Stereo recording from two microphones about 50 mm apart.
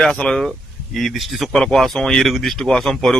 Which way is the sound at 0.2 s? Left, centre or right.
Left.